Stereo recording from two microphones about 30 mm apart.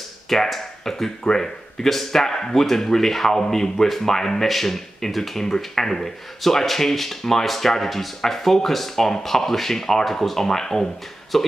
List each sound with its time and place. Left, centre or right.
0.3 s speech: centre